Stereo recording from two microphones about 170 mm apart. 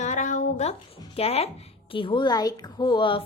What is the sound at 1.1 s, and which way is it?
Speech, 35° left (ahead or behind).